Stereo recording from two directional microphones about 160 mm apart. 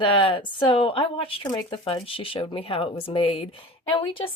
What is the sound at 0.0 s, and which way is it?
Speech, 30° left (ahead or behind).